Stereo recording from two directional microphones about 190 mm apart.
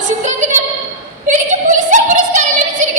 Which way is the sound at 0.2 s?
40° right (ahead or behind).